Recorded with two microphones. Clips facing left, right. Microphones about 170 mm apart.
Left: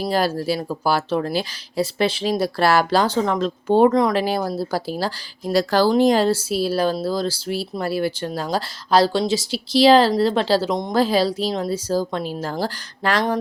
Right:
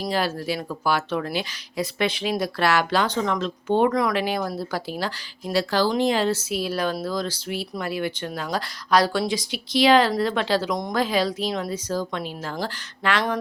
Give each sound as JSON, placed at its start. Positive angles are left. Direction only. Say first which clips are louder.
{"t": 0.1, "sound": "speech", "louder": "left 4 dB", "side_deg": 35}
{"t": 4.1, "sound": "speech", "louder": "left 4 dB", "side_deg": 35}